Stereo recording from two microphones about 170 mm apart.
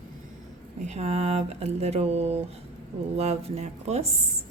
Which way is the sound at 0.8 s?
40° right (ahead or behind).